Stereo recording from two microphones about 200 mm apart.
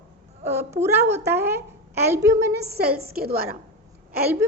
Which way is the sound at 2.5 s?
55° right (ahead or behind).